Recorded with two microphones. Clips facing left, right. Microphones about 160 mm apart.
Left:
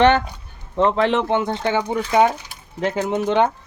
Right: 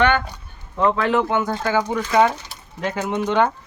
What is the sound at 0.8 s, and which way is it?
Speech, 25° left (ahead or behind).